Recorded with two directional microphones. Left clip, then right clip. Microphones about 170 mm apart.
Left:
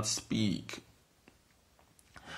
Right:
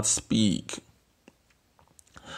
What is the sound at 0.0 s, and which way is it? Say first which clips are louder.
Speech: right 8 dB; 35° right (ahead or behind).